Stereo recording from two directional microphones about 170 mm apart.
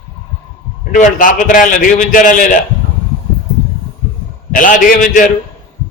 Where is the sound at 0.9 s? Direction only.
50° left (ahead or behind).